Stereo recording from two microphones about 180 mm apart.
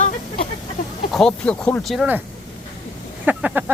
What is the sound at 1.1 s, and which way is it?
Speech, 5° left (ahead or behind).